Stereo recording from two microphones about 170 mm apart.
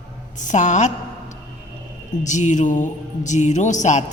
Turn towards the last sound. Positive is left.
turn(degrees=45)  # may be behind; listen again after turning